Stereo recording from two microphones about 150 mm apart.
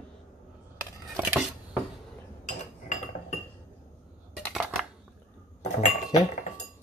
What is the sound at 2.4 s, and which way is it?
Cutlery, 55° left (ahead or behind).